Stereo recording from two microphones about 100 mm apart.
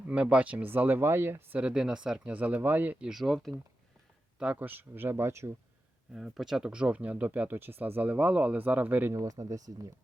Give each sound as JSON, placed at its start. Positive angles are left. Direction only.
{"t": 0.1, "sound": "speech", "side_deg": -10}
{"t": 1.5, "sound": "speech", "side_deg": -10}
{"t": 3.1, "sound": "speech", "side_deg": 0}
{"t": 4.4, "sound": "speech", "side_deg": -15}
{"t": 6.1, "sound": "speech", "side_deg": -5}
{"t": 9.1, "sound": "speech", "side_deg": -35}